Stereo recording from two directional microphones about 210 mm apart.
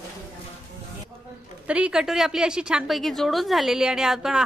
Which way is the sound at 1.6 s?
5° right (ahead or behind).